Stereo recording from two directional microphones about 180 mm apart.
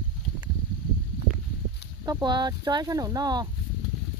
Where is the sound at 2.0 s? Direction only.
20° right (ahead or behind).